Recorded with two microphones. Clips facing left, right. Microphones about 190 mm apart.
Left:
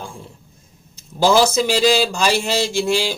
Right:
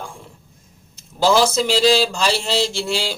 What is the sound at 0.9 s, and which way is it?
Speech, 15° left (ahead or behind).